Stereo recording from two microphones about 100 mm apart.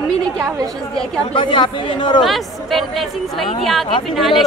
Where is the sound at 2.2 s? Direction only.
Centre (ahead or behind).